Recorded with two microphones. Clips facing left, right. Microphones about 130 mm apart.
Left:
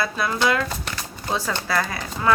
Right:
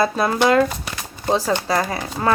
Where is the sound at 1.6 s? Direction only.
35° right (ahead or behind).